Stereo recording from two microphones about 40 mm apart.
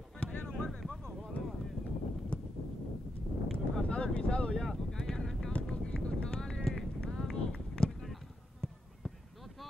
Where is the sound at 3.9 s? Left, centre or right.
Left.